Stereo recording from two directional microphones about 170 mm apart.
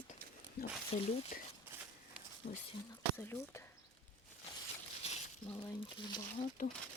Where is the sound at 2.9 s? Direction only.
15° left (ahead or behind).